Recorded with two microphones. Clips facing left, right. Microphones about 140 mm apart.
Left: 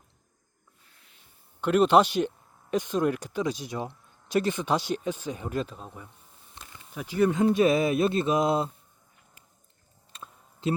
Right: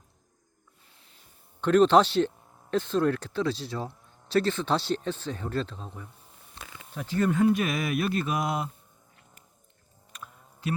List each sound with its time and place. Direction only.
1.6 s speech: 10° left (ahead or behind)
6.6 s insect: 20° left (ahead or behind)
6.9 s speech: 10° left (ahead or behind); by 8.7 s 25° left (ahead or behind)
10.1 s a sound: 25° left (ahead or behind)